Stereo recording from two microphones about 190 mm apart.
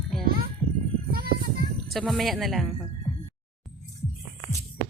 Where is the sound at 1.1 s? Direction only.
50° right (ahead or behind).